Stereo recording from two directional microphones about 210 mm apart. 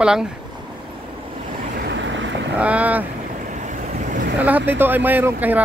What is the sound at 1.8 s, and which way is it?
Vehicle, 60° right (ahead or behind).